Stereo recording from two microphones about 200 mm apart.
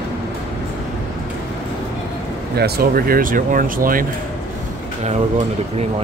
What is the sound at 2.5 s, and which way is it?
Speech, 50° right (ahead or behind).